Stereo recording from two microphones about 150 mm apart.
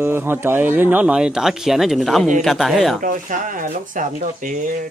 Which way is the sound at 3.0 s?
60° right (ahead or behind).